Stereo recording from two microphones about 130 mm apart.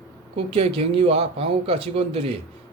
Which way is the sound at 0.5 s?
45° right (ahead or behind).